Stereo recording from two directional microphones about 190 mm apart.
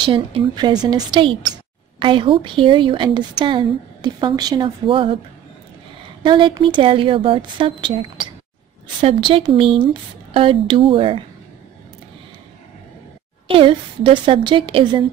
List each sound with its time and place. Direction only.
0.0 s a woman's voice: 30° right (ahead or behind)
6.2 s a woman's voice: 25° right (ahead or behind)
13.6 s a woman's voice: 25° right (ahead or behind)